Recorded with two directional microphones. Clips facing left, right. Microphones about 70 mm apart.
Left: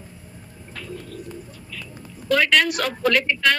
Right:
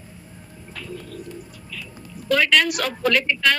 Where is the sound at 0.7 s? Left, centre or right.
Left.